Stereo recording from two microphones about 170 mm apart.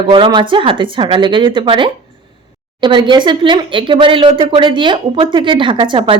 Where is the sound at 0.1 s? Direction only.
30° right (ahead or behind).